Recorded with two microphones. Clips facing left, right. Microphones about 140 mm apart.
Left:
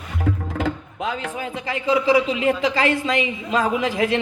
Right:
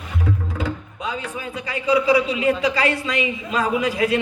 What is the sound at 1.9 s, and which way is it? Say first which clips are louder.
A man's voice: even; 45° left (ahead or behind).